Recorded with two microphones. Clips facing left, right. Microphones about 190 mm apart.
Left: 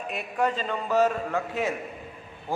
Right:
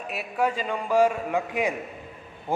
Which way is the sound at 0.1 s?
5° right (ahead or behind).